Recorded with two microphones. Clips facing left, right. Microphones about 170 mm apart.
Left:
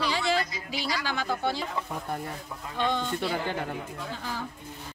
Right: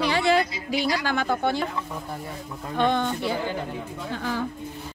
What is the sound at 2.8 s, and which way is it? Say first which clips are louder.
Speech: right 6 dB; 60° right (ahead or behind).